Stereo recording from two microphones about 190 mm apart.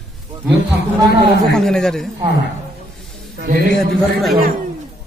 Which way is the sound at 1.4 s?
Centre (ahead or behind).